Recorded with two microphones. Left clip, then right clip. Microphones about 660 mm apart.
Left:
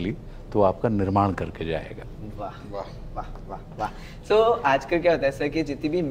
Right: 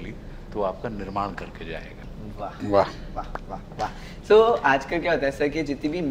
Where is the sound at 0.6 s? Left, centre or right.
Left.